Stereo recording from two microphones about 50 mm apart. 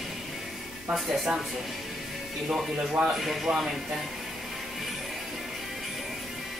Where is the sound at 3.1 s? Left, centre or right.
Centre.